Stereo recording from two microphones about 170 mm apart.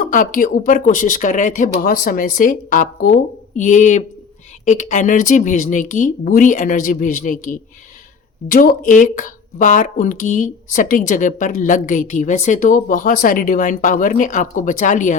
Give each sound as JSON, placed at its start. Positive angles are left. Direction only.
{"t": 0.0, "sound": "speech", "side_deg": 55}